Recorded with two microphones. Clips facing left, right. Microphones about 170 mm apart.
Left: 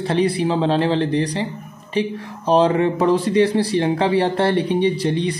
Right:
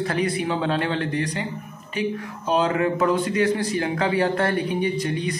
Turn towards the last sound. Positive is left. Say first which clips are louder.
# left 5 dB
turn(degrees=30)  # may be behind; listen again after turning